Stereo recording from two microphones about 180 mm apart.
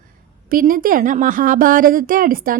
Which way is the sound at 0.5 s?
50° right (ahead or behind).